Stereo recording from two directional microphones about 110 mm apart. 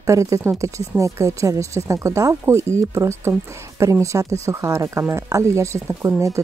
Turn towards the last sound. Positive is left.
turn(degrees=-25)  # may be behind; listen again after turning